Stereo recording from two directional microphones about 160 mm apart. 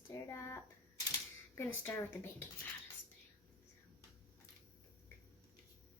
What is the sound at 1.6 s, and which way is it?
Speech, 15° left (ahead or behind).